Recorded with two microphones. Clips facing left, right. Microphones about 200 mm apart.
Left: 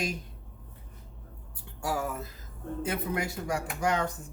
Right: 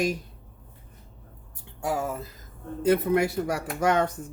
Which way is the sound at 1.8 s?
25° right (ahead or behind).